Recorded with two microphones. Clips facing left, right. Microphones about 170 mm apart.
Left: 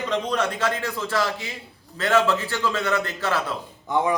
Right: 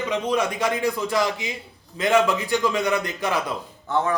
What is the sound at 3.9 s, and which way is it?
Speech, 10° left (ahead or behind).